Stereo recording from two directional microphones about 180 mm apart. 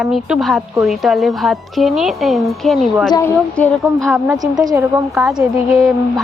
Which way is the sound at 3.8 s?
15° right (ahead or behind).